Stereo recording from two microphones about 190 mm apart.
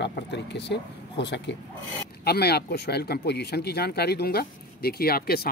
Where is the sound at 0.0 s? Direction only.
65° left (ahead or behind).